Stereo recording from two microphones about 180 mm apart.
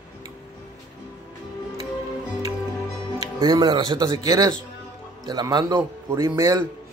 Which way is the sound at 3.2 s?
20° right (ahead or behind).